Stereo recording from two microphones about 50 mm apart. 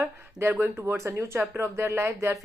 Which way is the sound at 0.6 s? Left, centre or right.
Right.